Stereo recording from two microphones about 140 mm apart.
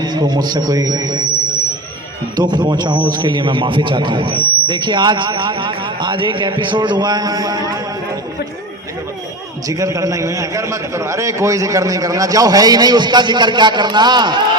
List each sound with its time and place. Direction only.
0.0 s a man's voice: 30° right (ahead or behind)
2.3 s speech: 30° right (ahead or behind)
9.6 s a man's voice: 25° right (ahead or behind)